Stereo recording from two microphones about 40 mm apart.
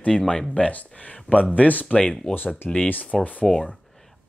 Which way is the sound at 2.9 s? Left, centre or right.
Left.